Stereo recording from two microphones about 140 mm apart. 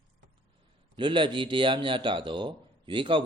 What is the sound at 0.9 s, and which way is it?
Speech, 35° right (ahead or behind).